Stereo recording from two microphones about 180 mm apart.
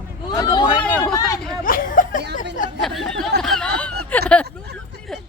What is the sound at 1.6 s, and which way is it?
Chuckle, 50° left (ahead or behind).